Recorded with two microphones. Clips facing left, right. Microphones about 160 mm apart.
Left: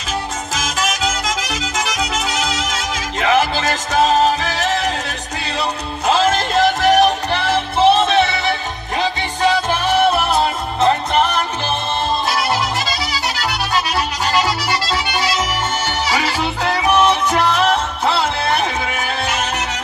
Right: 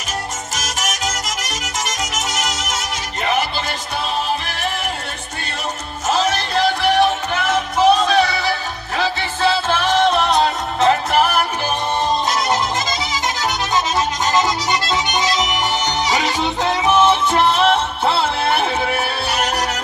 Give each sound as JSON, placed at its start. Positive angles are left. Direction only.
{"t": 3.2, "sound": "music", "side_deg": 90}
{"t": 5.4, "sound": "music", "side_deg": 70}
{"t": 12.3, "sound": "music", "side_deg": -20}